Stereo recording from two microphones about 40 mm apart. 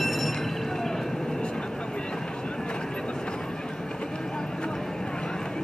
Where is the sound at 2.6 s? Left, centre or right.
Left.